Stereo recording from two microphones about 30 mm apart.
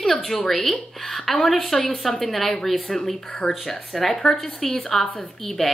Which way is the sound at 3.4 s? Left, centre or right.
Left.